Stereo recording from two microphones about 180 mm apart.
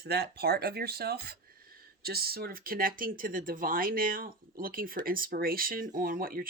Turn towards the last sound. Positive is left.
turn(degrees=-55)  # may be behind; listen again after turning